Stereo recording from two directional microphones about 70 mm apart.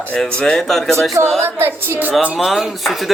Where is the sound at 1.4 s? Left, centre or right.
Right.